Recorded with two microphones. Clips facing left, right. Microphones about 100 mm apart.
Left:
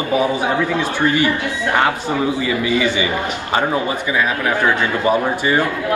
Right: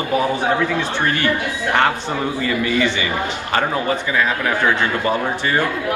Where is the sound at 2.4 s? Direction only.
15° left (ahead or behind).